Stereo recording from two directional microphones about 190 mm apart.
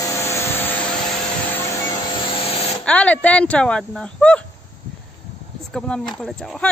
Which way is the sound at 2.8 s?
5° left (ahead or behind).